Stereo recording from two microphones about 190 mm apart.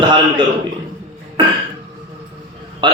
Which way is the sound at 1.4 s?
25° right (ahead or behind).